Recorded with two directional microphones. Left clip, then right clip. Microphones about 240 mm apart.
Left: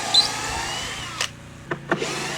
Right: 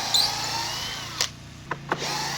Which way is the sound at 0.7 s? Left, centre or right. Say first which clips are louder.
Left 2 dB; centre.